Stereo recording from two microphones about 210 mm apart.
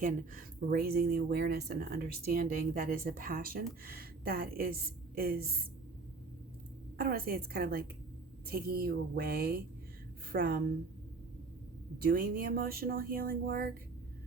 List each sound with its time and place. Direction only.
0.0 s speech: 40° right (ahead or behind)
7.0 s speech: 45° right (ahead or behind)
12.0 s speech: 45° right (ahead or behind)